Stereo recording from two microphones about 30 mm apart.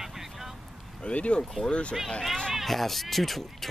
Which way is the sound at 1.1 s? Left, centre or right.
Left.